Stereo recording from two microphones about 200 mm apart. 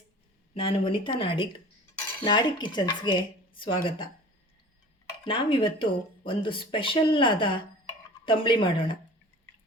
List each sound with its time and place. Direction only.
0.5 s speech: 25° left (ahead or behind)
5.2 s speech: 25° left (ahead or behind)